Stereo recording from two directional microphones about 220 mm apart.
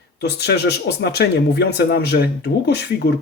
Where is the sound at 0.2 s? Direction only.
50° left (ahead or behind).